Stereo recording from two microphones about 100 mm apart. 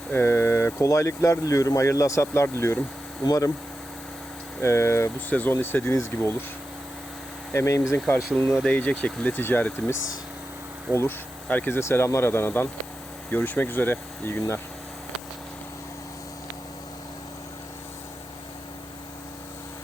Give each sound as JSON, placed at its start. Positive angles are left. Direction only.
{"t": 0.1, "sound": "speech", "side_deg": 25}
{"t": 4.6, "sound": "speech", "side_deg": 25}
{"t": 7.5, "sound": "speech", "side_deg": 30}
{"t": 8.6, "sound": "speech", "side_deg": 10}
{"t": 10.9, "sound": "speech", "side_deg": 20}
{"t": 11.8, "sound": "speech", "side_deg": 25}